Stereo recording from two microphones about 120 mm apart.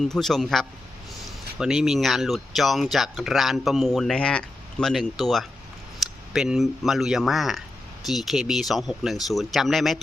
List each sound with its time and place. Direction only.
0.0 s speech: centre (ahead or behind)